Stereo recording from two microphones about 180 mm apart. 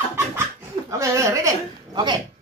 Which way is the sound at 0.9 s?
15° right (ahead or behind).